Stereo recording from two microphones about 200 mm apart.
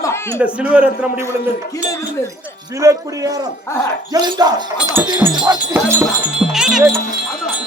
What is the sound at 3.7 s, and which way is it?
Speech, 15° left (ahead or behind).